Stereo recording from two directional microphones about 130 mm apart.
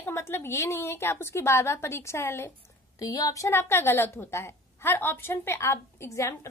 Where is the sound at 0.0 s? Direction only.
20° left (ahead or behind).